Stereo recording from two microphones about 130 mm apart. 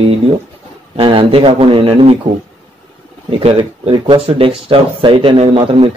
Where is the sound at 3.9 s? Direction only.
40° right (ahead or behind).